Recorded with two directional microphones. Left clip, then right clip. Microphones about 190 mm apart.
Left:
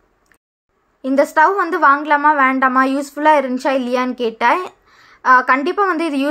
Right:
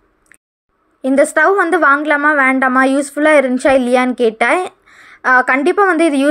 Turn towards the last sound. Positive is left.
turn(degrees=-25)  # may be behind; listen again after turning